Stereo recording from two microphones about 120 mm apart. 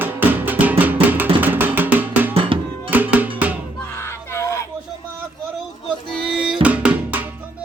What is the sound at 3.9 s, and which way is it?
Battle cry, 20° left (ahead or behind).